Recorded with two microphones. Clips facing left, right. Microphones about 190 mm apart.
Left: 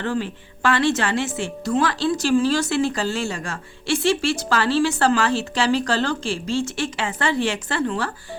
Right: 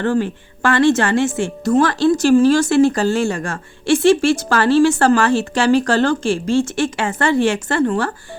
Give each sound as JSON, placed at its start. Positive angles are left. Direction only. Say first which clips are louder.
{"t": 0.0, "sound": "speech", "louder": "right 7 dB", "side_deg": -50}